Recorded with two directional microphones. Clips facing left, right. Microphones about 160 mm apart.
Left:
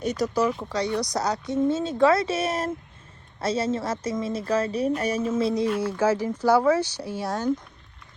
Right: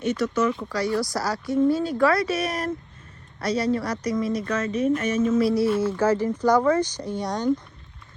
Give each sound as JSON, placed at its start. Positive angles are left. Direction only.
{"t": 0.2, "sound": "speech", "side_deg": 35}
{"t": 0.6, "sound": "speech", "side_deg": 25}
{"t": 5.4, "sound": "speech", "side_deg": 20}
{"t": 5.7, "sound": "speech", "side_deg": 10}